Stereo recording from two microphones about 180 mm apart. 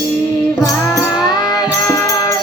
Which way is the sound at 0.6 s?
20° left (ahead or behind).